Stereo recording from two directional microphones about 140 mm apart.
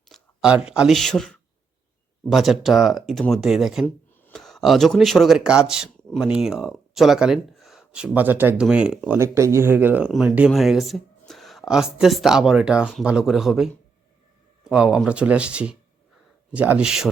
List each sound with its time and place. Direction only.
0.1 s speech: 5° right (ahead or behind)
3.8 s a sound: 15° left (ahead or behind)
4.4 s speech: 5° left (ahead or behind)
9.1 s speech: 20° right (ahead or behind)